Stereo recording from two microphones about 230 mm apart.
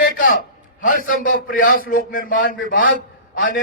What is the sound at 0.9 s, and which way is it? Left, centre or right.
A man's voice, left.